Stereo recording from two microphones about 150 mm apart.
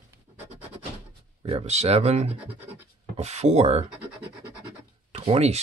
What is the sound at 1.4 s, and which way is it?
Speech, 40° right (ahead or behind).